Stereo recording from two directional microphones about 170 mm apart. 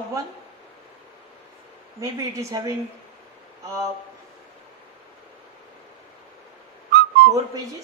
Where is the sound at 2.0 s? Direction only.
20° right (ahead or behind).